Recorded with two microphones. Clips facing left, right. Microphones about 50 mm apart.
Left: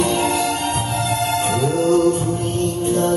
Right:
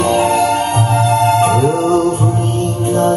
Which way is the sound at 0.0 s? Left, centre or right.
Right.